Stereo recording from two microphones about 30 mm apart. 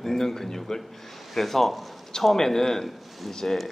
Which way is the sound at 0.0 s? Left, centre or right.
Centre.